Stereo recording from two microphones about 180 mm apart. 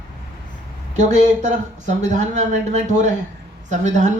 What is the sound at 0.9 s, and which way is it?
Speech, 40° right (ahead or behind).